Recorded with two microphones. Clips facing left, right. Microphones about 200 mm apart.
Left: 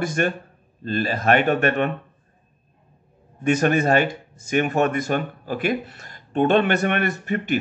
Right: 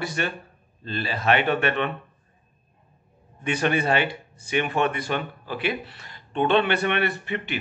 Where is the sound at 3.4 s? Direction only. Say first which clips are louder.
Left 5 dB; 45° left (ahead or behind).